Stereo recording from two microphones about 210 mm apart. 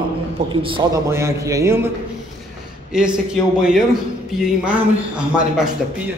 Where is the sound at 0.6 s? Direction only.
25° right (ahead or behind).